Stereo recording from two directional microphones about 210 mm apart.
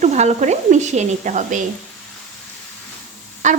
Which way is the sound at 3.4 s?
35° right (ahead or behind).